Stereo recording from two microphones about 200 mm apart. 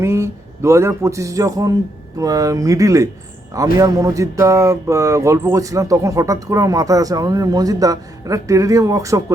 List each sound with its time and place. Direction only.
0.0 s speech: 15° right (ahead or behind)